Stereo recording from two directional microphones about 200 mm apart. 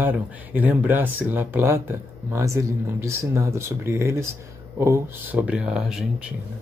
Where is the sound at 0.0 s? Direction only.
10° right (ahead or behind).